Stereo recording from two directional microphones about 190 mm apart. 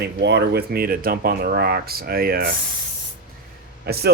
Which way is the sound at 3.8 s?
55° right (ahead or behind).